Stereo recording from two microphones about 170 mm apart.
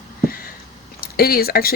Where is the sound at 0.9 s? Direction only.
60° left (ahead or behind).